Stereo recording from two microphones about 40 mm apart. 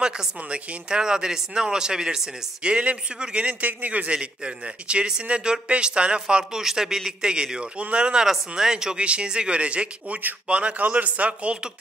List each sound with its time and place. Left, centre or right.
0.5 s speech: right
6.5 s a man's voice: centre; by 11.5 s right